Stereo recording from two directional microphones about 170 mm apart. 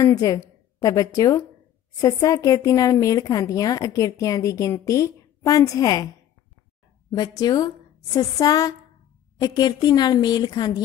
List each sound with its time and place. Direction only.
0.0 s a woman's voice: 20° left (ahead or behind)
7.1 s a woman's voice: 25° left (ahead or behind)